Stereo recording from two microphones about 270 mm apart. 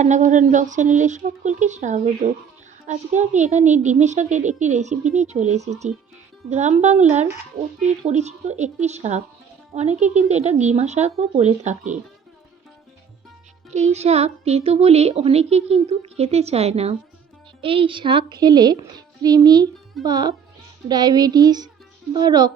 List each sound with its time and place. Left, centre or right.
0.0 s a child's voice: right
13.7 s a child's voice: right